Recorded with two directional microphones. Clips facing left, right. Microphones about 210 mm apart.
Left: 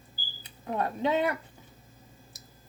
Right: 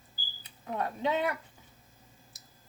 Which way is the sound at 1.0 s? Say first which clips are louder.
Left 3 dB; 35° left (ahead or behind).